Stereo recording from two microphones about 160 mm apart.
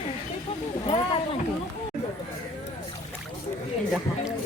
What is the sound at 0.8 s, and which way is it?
Speech, 30° left (ahead or behind).